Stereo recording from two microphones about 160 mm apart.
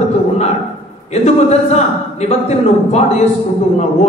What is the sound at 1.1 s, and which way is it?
A man's voice, 45° left (ahead or behind).